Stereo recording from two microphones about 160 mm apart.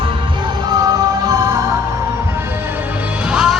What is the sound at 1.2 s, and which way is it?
Music, 20° right (ahead or behind).